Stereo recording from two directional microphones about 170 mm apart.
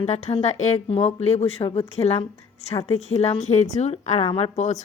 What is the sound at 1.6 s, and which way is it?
Speech, 20° left (ahead or behind).